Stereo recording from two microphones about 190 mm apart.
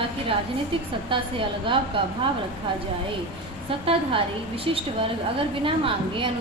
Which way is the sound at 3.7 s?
30° right (ahead or behind).